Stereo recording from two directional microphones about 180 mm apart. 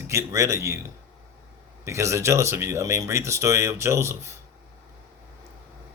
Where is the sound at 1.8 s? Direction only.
15° right (ahead or behind).